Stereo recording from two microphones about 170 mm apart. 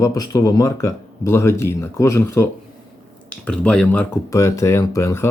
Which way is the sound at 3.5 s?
5° left (ahead or behind).